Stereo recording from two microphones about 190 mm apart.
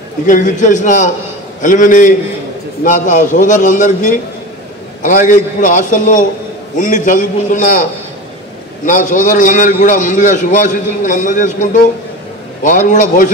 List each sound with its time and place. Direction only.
0.3 s a man's voice: 40° left (ahead or behind)
8.8 s a man's voice: 45° left (ahead or behind)